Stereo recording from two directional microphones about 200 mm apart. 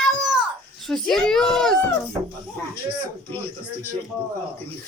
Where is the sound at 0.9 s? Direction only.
Centre (ahead or behind).